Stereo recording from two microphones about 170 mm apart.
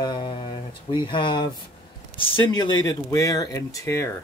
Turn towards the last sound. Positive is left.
turn(degrees=15)  # may be behind; listen again after turning